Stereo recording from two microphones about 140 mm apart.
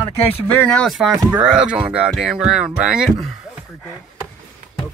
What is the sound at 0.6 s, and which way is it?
Speech, 5° left (ahead or behind).